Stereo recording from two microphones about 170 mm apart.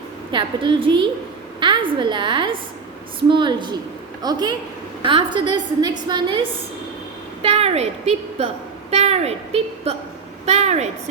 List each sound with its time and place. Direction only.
0.3 s a woman's voice: 30° right (ahead or behind)
7.4 s a woman's voice: 35° right (ahead or behind)